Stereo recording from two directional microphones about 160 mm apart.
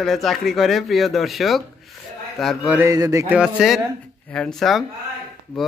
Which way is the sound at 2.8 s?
20° right (ahead or behind).